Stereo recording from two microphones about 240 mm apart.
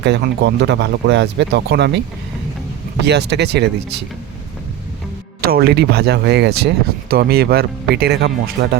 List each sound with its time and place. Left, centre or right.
0.0 s speech: right
3.1 s speech: right
5.4 s speech: right